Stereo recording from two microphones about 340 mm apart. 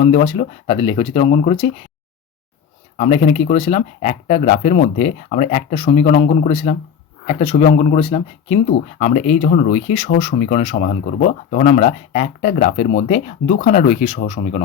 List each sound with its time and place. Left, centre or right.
0.0 s speech: centre
3.0 s speech: centre